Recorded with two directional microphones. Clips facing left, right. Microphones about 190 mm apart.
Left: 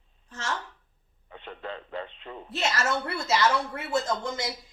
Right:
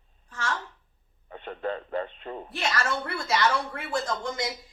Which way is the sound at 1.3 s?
45° right (ahead or behind).